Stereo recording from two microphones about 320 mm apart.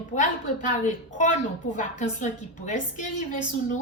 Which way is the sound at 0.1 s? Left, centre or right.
Left.